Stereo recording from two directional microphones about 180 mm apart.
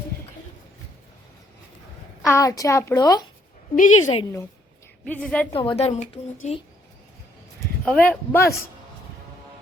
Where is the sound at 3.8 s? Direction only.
40° left (ahead or behind).